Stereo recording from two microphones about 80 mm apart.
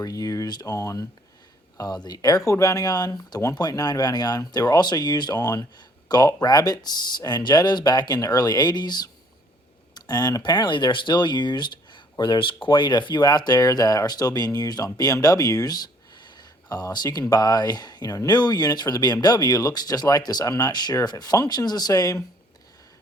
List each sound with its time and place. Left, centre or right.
0.0 s speech: left
2.0 s speech: left
12.2 s speech: left